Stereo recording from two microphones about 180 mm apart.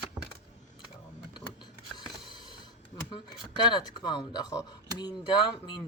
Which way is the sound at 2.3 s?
25° left (ahead or behind).